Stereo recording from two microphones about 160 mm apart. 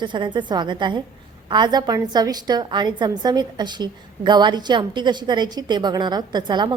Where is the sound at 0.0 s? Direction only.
30° right (ahead or behind).